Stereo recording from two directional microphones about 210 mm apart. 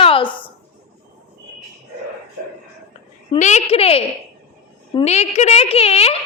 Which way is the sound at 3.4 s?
35° left (ahead or behind).